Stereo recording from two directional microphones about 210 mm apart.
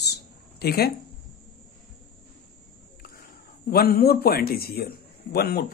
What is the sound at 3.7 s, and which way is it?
Speech, 45° left (ahead or behind).